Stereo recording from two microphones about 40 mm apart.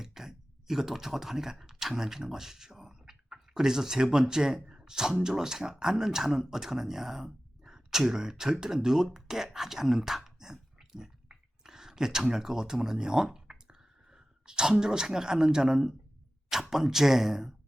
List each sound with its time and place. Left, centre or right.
0.0 s speech: centre
13.5 s a sound: centre
16.5 s speech: centre